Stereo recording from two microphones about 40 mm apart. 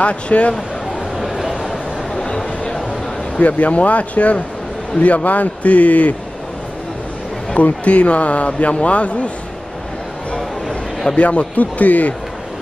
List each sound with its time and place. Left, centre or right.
0.0 s a man's voice: left
1.2 s a sound: centre
2.1 s a sound: left
3.3 s a man's voice: left
7.8 s a man's voice: left
11.1 s a man's voice: left